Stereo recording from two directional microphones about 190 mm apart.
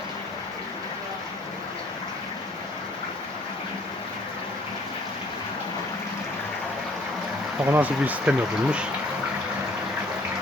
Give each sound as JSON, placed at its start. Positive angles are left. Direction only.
{"t": 7.6, "sound": "speech", "side_deg": -10}